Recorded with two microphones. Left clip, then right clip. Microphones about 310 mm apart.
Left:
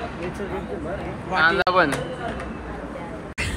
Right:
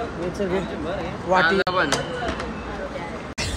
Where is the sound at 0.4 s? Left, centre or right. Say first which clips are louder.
Right 8 dB; right.